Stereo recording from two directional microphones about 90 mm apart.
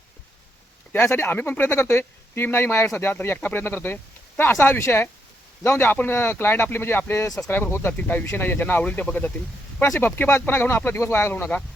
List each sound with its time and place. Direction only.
1.0 s speech: 25° left (ahead or behind)
9.8 s speech: 30° left (ahead or behind)